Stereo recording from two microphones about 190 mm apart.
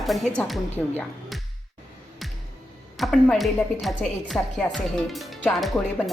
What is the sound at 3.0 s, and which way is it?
A woman's voice, centre (ahead or behind).